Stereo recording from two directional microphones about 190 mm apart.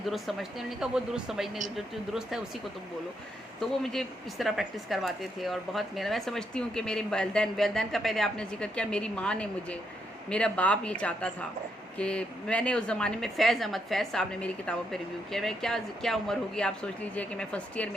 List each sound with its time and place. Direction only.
0.0 s speech: centre (ahead or behind)
3.6 s speech: centre (ahead or behind)